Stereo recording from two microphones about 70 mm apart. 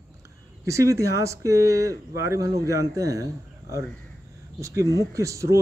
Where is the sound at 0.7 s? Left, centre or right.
Right.